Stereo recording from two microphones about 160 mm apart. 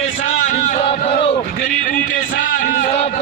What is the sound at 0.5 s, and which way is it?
Chant, 40° left (ahead or behind).